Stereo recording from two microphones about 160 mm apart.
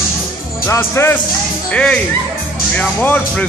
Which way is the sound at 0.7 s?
15° left (ahead or behind).